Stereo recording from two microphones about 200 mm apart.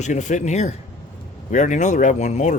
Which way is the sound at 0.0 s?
35° left (ahead or behind).